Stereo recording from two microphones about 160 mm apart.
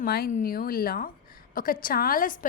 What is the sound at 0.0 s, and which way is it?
A woman's voice, 70° left (ahead or behind).